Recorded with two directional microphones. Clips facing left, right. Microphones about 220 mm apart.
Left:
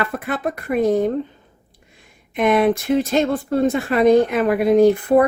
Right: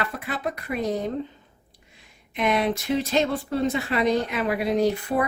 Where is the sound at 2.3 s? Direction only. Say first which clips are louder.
Left 7 dB; 50° left (ahead or behind).